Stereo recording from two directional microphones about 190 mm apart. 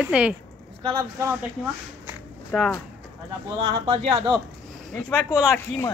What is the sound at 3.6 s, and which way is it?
Speech, 30° right (ahead or behind).